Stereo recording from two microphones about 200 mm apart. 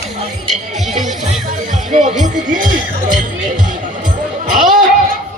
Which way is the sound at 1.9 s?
35° right (ahead or behind).